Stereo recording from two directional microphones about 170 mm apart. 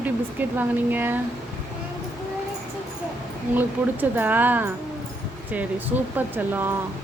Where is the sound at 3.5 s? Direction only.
10° right (ahead or behind).